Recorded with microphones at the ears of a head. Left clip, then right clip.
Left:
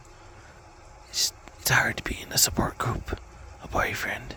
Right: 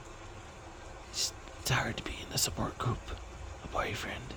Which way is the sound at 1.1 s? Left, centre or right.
Left.